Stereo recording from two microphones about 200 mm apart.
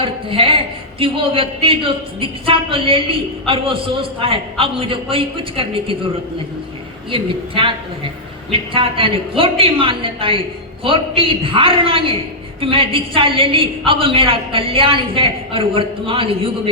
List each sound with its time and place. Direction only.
0.0 s a man's voice: 25° right (ahead or behind)
7.1 s a man's voice: 25° right (ahead or behind)